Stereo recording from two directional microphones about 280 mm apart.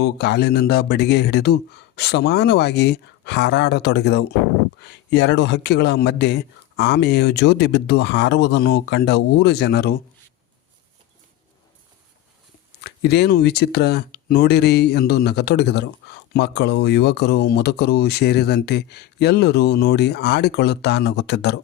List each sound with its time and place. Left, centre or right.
0.0 s speech: left
12.8 s speech: left